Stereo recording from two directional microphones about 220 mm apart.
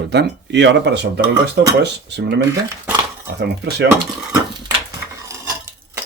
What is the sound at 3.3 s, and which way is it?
Speech, 50° right (ahead or behind).